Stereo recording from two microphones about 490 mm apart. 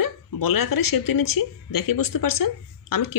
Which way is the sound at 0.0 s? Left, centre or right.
Left.